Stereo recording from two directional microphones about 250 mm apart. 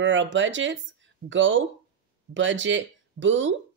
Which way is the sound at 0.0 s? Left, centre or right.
Right.